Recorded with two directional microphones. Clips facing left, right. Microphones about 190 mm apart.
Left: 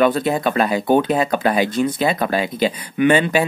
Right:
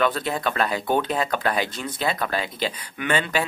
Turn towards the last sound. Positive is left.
turn(degrees=15)  # may be behind; listen again after turning